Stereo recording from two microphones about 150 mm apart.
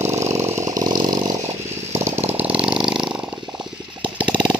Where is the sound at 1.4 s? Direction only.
50° right (ahead or behind).